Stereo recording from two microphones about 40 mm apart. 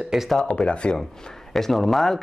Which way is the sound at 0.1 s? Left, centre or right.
Centre.